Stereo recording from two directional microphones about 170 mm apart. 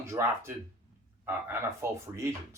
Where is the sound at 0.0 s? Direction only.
15° right (ahead or behind).